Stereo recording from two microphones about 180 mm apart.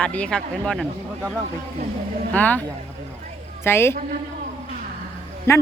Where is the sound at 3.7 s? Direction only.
15° left (ahead or behind).